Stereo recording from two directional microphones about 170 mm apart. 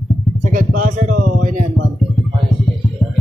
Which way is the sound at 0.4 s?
55° right (ahead or behind).